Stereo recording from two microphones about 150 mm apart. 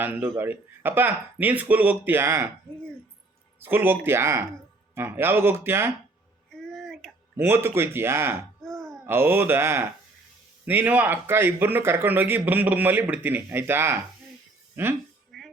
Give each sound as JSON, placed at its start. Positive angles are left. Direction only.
{"t": 0.0, "sound": "speech", "side_deg": -15}
{"t": 3.6, "sound": "speech", "side_deg": -15}
{"t": 6.7, "sound": "a sound", "side_deg": 0}
{"t": 7.3, "sound": "speech", "side_deg": -15}
{"t": 8.6, "sound": "a sound", "side_deg": 5}
{"t": 9.0, "sound": "speech", "side_deg": -15}
{"t": 15.3, "sound": "music", "side_deg": 0}